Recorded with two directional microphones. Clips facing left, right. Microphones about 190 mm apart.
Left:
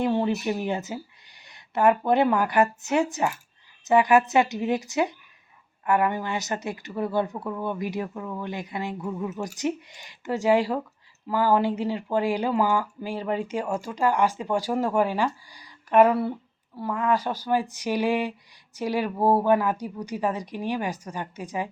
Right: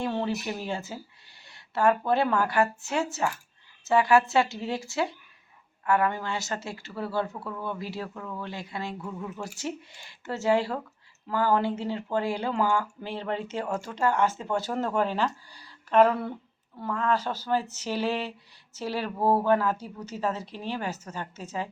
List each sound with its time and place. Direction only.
0.0 s speech: 20° left (ahead or behind)